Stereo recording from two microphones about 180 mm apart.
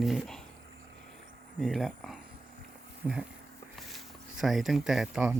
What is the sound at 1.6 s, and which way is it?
Speech, centre (ahead or behind).